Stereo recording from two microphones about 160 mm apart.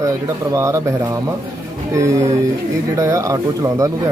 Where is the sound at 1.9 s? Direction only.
20° right (ahead or behind).